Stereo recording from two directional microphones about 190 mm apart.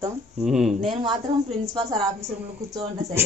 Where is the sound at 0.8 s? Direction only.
25° right (ahead or behind).